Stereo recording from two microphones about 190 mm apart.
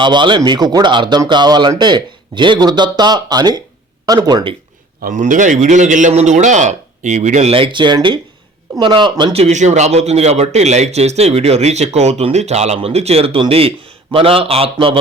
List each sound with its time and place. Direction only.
0.0 s speech: 25° right (ahead or behind)
5.0 s speech: 45° right (ahead or behind)